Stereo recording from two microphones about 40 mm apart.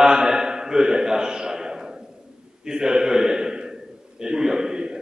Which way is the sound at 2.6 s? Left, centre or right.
Centre.